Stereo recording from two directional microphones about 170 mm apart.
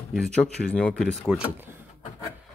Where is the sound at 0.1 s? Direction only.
Centre (ahead or behind).